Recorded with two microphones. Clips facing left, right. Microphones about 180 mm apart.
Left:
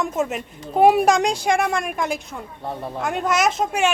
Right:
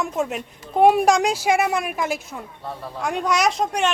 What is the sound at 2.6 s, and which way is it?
Speech, 20° left (ahead or behind).